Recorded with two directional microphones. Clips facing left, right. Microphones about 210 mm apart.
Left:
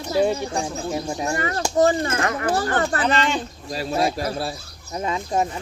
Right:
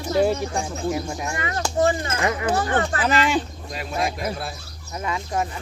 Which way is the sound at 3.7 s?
35° left (ahead or behind).